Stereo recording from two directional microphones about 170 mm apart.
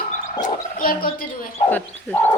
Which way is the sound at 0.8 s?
55° left (ahead or behind).